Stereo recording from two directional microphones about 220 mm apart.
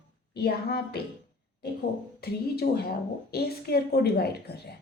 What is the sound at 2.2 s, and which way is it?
Speech, 45° left (ahead or behind).